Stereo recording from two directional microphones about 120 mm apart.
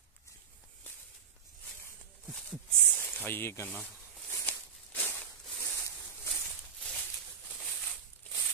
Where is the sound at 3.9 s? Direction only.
5° right (ahead or behind).